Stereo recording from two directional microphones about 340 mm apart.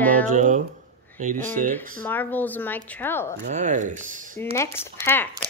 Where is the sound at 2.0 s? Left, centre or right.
Centre.